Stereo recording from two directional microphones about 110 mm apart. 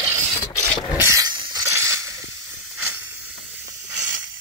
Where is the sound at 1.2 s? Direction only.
35° right (ahead or behind).